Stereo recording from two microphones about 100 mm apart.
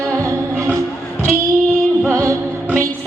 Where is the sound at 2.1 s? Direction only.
30° right (ahead or behind).